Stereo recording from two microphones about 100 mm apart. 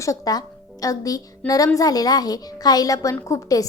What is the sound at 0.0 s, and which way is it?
Speech, 35° left (ahead or behind).